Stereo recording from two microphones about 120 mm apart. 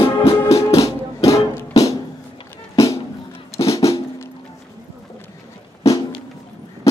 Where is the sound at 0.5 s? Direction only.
25° left (ahead or behind).